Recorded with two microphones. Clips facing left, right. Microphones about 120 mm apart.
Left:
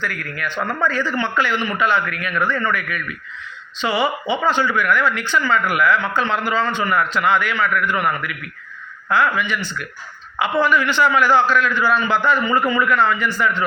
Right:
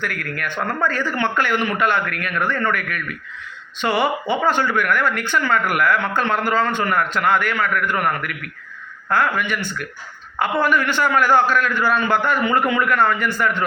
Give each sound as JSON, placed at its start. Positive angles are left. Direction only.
{"t": 0.0, "sound": "a man's voice", "side_deg": -55}